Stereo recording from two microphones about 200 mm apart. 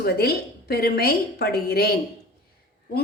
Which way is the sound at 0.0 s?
50° left (ahead or behind).